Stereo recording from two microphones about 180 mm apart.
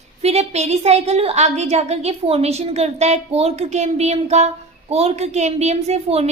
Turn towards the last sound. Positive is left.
turn(degrees=-35)  # may be behind; listen again after turning